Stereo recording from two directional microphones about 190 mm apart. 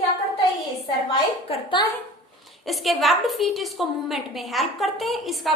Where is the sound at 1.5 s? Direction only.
25° left (ahead or behind).